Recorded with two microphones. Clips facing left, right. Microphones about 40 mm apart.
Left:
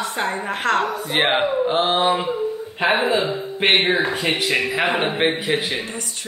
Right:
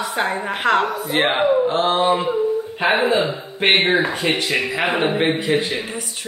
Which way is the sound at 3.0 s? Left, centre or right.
Right.